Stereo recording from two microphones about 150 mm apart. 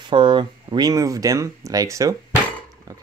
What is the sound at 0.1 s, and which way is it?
Speech, 30° right (ahead or behind).